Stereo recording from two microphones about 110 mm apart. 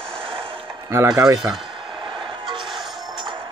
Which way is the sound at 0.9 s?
30° right (ahead or behind).